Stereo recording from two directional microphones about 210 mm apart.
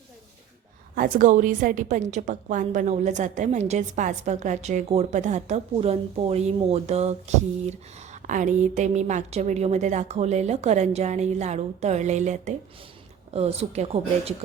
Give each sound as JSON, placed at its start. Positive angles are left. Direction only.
{"t": 0.9, "sound": "a woman's voice", "side_deg": -40}